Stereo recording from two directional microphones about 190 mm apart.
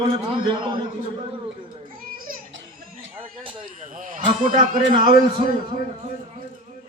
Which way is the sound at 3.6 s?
45° right (ahead or behind).